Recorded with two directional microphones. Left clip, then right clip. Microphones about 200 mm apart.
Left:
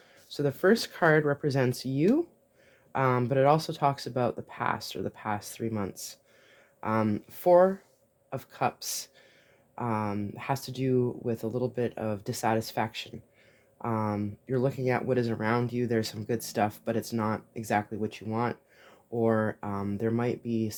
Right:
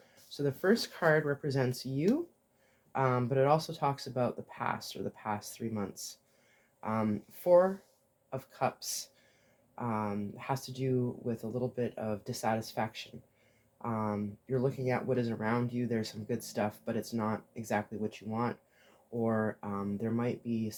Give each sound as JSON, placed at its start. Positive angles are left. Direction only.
{"t": 0.3, "sound": "speech", "side_deg": 45}